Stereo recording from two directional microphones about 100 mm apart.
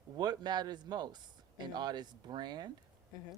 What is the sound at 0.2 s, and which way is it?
Speech, 45° right (ahead or behind).